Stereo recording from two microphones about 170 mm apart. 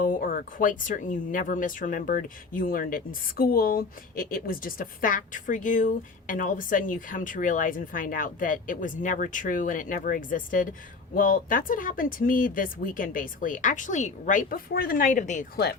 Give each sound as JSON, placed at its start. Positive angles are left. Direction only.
{"t": 0.0, "sound": "speech", "side_deg": 55}